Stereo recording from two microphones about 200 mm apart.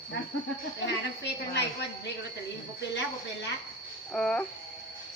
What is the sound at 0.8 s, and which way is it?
Speech, 60° left (ahead or behind).